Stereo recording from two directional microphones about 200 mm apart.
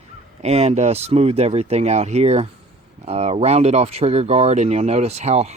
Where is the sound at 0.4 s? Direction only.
30° right (ahead or behind).